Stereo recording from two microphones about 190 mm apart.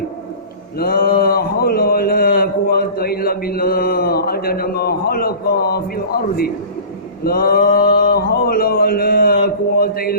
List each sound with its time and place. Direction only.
0.8 s speech: 50° left (ahead or behind)
7.3 s mantra: 50° left (ahead or behind)